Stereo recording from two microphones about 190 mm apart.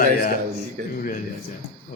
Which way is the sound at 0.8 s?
50° right (ahead or behind).